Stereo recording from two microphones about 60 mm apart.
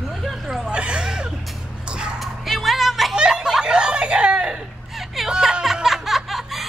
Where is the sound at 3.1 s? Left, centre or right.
Centre.